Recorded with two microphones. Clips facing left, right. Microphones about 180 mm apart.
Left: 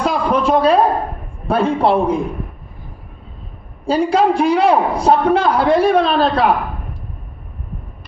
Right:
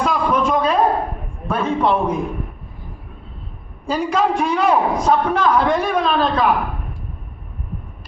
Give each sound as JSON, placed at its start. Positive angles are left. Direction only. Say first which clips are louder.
{"t": 0.0, "sound": "a sound", "louder": "left 2 dB", "side_deg": 35}
{"t": 1.5, "sound": "a man's voice", "louder": "left 3 dB", "side_deg": 35}
{"t": 3.8, "sound": "a man's voice", "louder": "left 4 dB", "side_deg": 30}